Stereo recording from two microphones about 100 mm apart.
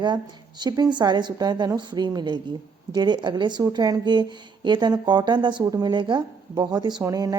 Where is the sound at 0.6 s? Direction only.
45° right (ahead or behind).